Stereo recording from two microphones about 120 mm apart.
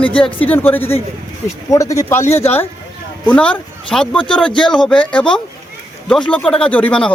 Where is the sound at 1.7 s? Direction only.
25° left (ahead or behind).